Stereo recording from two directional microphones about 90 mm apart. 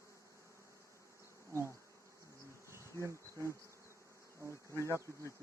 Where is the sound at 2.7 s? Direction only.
30° right (ahead or behind).